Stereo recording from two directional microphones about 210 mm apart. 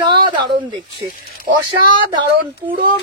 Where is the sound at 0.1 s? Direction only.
20° right (ahead or behind).